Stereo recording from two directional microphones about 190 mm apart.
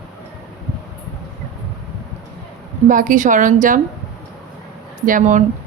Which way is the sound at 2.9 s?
45° right (ahead or behind).